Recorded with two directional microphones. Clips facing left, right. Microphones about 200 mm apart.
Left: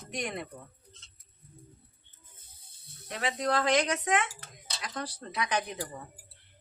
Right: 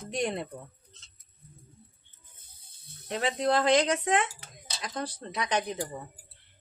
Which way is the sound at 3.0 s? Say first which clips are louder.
Right 4 dB; 30° right (ahead or behind).